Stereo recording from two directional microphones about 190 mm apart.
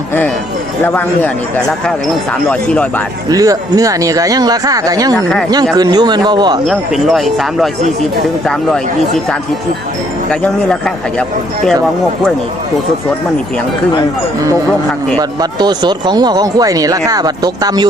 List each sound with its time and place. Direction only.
0.9 s speech: 10° left (ahead or behind)
3.2 s speech: 20° right (ahead or behind)
5.1 s speech: 5° left (ahead or behind)
5.7 s speech: 20° right (ahead or behind)
6.7 s speech: centre (ahead or behind)
10.4 s speech: 5° left (ahead or behind)
15.2 s speech: 20° right (ahead or behind)